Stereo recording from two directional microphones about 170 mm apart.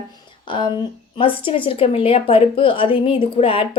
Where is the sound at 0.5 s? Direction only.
30° left (ahead or behind).